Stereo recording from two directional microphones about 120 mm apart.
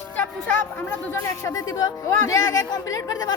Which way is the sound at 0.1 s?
10° left (ahead or behind).